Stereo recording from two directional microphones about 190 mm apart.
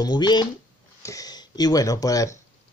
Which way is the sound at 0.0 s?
20° left (ahead or behind).